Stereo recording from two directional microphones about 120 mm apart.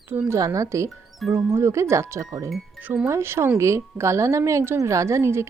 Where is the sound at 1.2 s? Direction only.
Centre (ahead or behind).